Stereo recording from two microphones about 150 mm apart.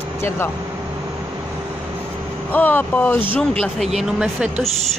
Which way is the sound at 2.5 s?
10° left (ahead or behind).